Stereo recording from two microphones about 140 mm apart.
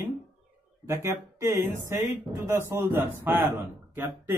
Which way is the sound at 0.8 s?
20° right (ahead or behind).